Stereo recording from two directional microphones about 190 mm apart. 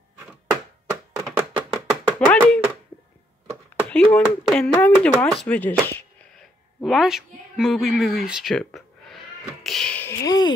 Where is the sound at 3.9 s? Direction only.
5° left (ahead or behind).